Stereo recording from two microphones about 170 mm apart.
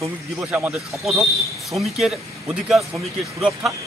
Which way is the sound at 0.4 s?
5° right (ahead or behind).